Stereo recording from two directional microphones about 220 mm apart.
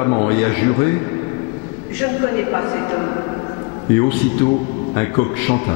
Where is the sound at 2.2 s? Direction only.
20° left (ahead or behind).